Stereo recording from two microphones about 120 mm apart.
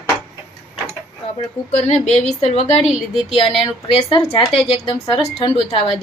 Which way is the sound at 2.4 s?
55° left (ahead or behind).